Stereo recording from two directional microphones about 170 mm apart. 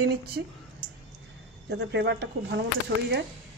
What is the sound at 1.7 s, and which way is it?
Speech, 85° right.